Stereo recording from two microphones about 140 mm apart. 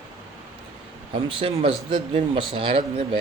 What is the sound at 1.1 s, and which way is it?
Speech, 35° right (ahead or behind).